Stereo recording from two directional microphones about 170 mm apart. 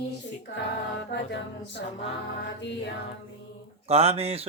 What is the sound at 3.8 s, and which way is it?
Mantra, 35° right (ahead or behind).